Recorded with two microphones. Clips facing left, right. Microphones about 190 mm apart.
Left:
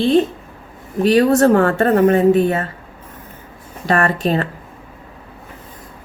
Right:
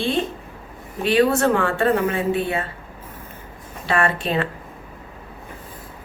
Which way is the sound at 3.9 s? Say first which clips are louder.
Left 5 dB; 40° left (ahead or behind).